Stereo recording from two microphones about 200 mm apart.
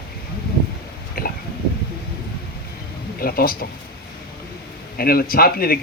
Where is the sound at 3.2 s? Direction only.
50° left (ahead or behind).